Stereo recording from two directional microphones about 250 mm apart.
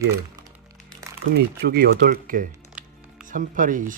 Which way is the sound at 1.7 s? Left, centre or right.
Right.